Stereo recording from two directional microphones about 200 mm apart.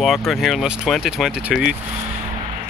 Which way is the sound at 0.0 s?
Centre (ahead or behind).